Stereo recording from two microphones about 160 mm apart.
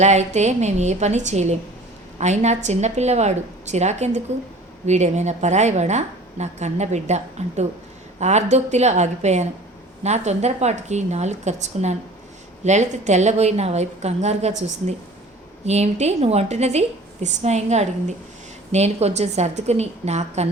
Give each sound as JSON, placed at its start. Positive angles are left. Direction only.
{"t": 0.0, "sound": "a woman's voice", "side_deg": -45}